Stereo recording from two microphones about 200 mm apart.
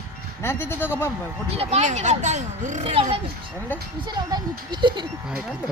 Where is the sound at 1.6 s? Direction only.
30° right (ahead or behind).